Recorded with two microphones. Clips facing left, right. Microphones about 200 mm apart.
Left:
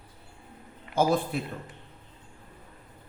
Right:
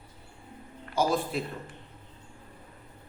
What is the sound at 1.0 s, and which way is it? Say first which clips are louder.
Speech: left 2 dB; 55° left (ahead or behind).